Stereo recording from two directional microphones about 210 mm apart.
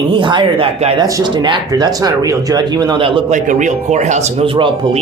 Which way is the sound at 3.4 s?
35° right (ahead or behind).